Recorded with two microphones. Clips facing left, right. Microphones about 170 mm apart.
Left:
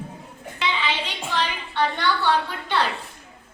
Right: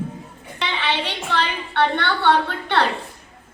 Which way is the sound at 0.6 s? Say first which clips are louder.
Right 2 dB; 65° right (ahead or behind).